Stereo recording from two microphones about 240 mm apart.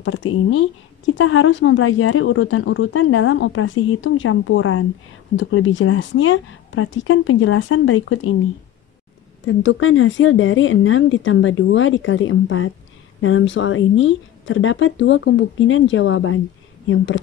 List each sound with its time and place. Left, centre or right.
0.0 s a woman's voice: left
9.5 s a woman's voice: left